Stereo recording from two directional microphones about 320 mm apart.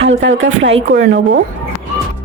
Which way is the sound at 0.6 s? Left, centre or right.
Right.